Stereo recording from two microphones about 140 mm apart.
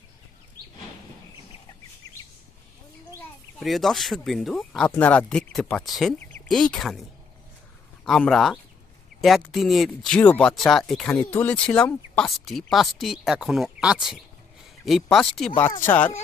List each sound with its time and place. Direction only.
3.6 s speech: centre (ahead or behind)
6.1 s a sound: 10° left (ahead or behind)
6.5 s speech: centre (ahead or behind)
8.0 s speech: 5° left (ahead or behind)